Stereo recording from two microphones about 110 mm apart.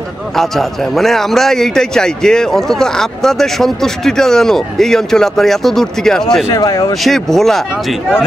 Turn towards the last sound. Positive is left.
turn(degrees=0)  # may be behind; listen again after turning